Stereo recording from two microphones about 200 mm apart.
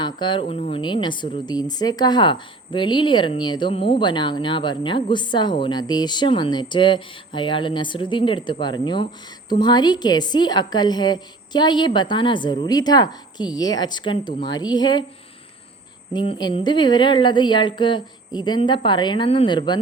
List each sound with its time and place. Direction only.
0.0 s a woman's voice: 25° left (ahead or behind)
16.1 s a woman's voice: 25° left (ahead or behind)